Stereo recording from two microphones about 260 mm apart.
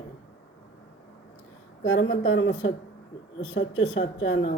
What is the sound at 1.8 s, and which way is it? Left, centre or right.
Speech, left.